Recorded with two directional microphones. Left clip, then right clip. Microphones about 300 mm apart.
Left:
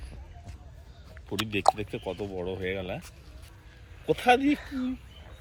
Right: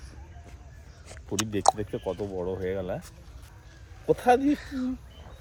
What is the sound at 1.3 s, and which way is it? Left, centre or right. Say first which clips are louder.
Speech: right 1 dB; centre.